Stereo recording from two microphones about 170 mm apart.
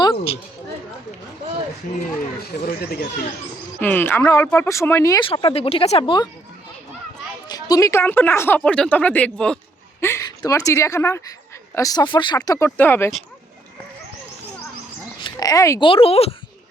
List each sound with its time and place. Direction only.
0.0 s a sound: 30° left (ahead or behind)
2.4 s speech: 65° left (ahead or behind)
3.8 s a woman's voice: 10° left (ahead or behind)
5.2 s speech: 30° left (ahead or behind)
7.4 s a woman's voice: 20° left (ahead or behind)
12.5 s a woman's voice: 15° left (ahead or behind)
15.2 s a sound: 20° left (ahead or behind)
15.8 s speech: 30° left (ahead or behind)